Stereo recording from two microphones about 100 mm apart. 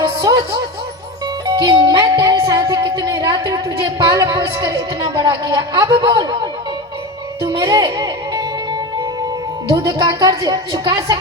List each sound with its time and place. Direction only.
0.0 s music: 35° right (ahead or behind)
4.4 s speech: 30° right (ahead or behind)
4.9 s speech: 45° right (ahead or behind)
7.7 s speech: 30° right (ahead or behind)
7.9 s music: 45° right (ahead or behind)
9.8 s speech: 45° right (ahead or behind)